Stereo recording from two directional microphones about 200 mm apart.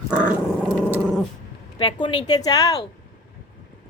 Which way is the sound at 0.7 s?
5° right (ahead or behind).